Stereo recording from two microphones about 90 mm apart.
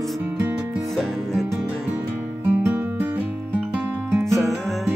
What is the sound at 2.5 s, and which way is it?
Music, 20° right (ahead or behind).